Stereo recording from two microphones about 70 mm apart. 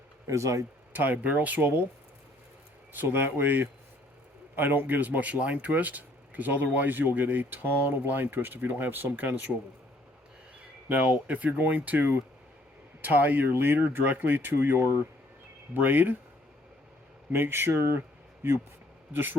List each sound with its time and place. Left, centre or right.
0.3 s speech: right
0.9 s speech: right
2.9 s speech: right
10.8 s speech: right
17.3 s speech: right
19.1 s speech: right